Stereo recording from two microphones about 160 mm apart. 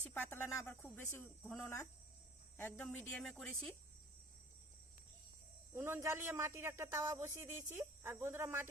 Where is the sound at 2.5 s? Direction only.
10° left (ahead or behind).